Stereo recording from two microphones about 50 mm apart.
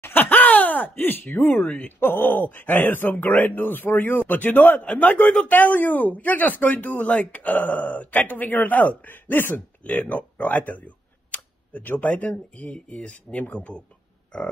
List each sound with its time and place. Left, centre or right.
0.0 s speech: left
12.7 s speech: left